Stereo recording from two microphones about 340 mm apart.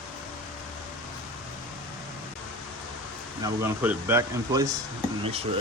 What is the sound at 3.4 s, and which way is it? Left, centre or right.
Speech, centre.